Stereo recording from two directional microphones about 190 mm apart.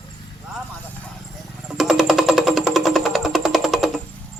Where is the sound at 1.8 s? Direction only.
Centre (ahead or behind).